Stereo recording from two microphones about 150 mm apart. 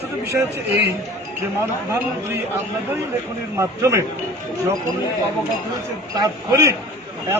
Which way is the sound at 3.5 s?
20° right (ahead or behind).